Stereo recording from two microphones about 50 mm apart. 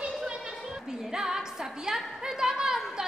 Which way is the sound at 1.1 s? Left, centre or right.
Centre.